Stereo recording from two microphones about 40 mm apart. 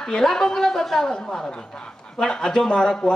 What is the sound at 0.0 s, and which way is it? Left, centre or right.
Speech, centre.